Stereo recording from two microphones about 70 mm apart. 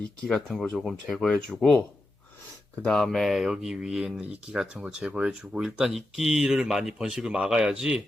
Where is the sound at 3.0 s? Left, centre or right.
Centre.